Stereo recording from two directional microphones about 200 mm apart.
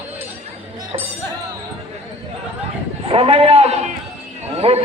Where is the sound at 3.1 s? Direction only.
30° right (ahead or behind).